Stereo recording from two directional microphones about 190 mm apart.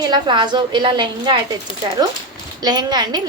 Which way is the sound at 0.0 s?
25° right (ahead or behind).